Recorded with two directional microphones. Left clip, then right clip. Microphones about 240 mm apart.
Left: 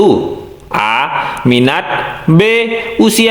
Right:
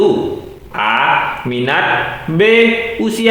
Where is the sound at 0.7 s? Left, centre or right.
Left.